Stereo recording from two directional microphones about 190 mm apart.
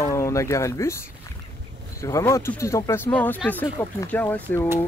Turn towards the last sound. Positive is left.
turn(degrees=10)  # may be behind; listen again after turning